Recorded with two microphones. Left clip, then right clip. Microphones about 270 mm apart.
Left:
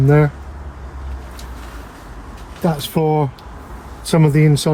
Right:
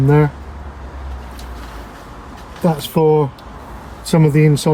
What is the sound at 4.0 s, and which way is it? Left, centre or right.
Speech, left.